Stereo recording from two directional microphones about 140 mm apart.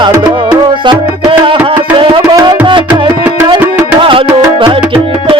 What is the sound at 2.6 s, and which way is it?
Tabla, 35° right (ahead or behind).